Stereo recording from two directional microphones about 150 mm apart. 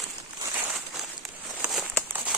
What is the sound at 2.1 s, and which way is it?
Crumpling, 10° right (ahead or behind).